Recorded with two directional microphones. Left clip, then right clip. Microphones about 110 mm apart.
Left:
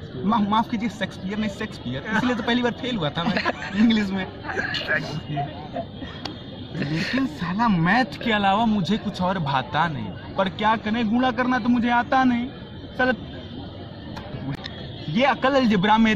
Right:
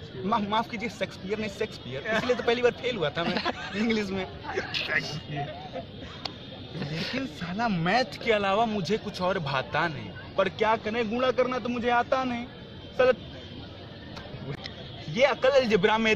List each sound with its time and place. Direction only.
0.3 s speech: 35° right (ahead or behind)
3.3 s speech: 20° right (ahead or behind); by 4.3 s 40° right (ahead or behind)
4.5 s speech: 20° right (ahead or behind)
6.8 s speech: 25° right (ahead or behind)
15.1 s speech: 35° right (ahead or behind)